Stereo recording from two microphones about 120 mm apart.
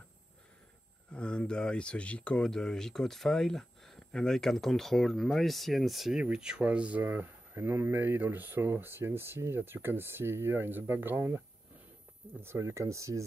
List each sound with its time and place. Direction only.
1.1 s speech: 10° left (ahead or behind); by 13.2 s 25° right (ahead or behind)